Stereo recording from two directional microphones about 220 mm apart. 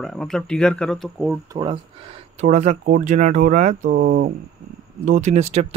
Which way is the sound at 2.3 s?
30° right (ahead or behind).